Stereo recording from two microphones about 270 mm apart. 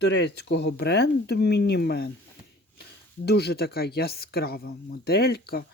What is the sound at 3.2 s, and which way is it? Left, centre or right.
Speech, left.